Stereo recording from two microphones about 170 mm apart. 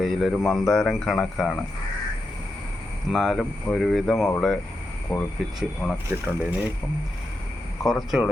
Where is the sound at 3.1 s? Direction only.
Centre (ahead or behind).